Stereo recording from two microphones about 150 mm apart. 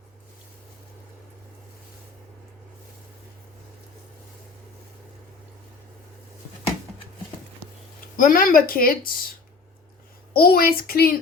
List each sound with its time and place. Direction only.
8.1 s speech: 65° left (ahead or behind)
10.3 s speech: 90° left